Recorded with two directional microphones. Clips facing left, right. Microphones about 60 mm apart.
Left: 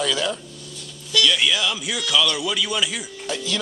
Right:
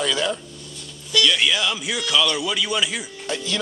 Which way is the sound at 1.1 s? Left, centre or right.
Right.